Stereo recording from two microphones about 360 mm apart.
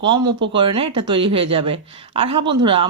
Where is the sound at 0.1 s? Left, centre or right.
Centre.